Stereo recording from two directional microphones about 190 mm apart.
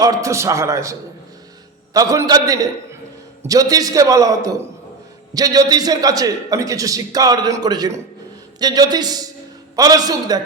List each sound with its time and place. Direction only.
0.0 s a man's voice: 15° right (ahead or behind)